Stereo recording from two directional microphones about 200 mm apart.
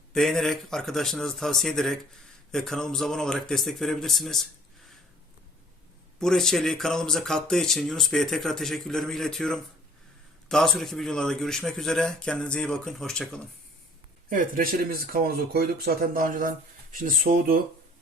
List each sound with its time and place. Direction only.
0.1 s speech: centre (ahead or behind)
6.1 s speech: centre (ahead or behind)
14.3 s speech: 45° right (ahead or behind)